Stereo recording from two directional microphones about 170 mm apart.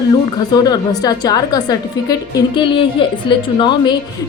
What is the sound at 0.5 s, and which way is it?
A woman's voice, 25° left (ahead or behind).